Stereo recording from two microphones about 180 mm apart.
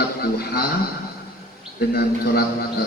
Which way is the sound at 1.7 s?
60° left (ahead or behind).